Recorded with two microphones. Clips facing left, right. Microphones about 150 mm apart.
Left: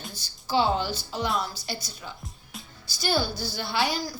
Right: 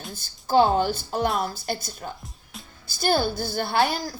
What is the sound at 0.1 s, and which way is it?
A woman's voice, 50° right (ahead or behind).